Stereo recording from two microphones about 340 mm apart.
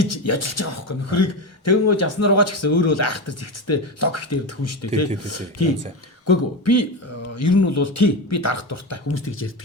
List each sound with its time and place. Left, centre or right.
0.0 s speech: left